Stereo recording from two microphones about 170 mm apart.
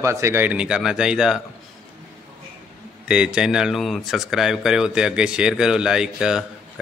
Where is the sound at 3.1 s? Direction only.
5° right (ahead or behind).